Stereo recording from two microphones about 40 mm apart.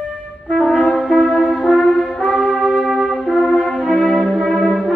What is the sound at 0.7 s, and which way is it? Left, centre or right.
Brass instrument, left.